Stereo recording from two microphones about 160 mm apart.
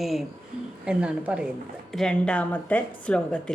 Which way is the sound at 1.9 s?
5° left (ahead or behind).